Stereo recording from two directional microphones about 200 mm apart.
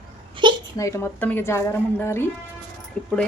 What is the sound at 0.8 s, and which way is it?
Speech, 15° left (ahead or behind).